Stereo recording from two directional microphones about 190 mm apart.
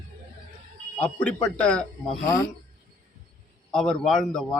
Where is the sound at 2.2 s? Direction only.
20° left (ahead or behind).